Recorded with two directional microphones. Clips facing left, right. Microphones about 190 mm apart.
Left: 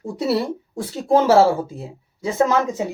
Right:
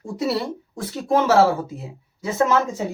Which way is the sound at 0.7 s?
30° left (ahead or behind).